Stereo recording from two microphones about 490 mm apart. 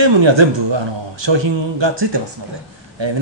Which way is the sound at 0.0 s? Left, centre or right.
Right.